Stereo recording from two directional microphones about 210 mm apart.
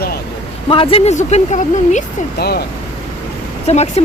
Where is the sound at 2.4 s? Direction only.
50° left (ahead or behind).